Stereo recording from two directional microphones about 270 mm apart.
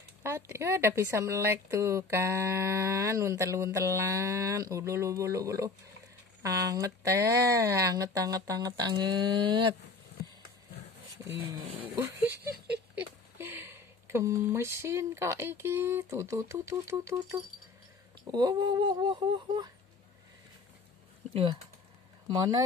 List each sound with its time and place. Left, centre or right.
0.2 s a woman's voice: centre
11.8 s a woman's voice: centre
21.3 s speech: centre